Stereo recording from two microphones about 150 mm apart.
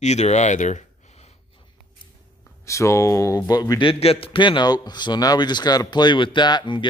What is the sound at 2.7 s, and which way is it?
A man's voice, 20° left (ahead or behind).